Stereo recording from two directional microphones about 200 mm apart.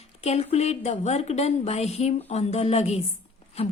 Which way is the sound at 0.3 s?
30° left (ahead or behind).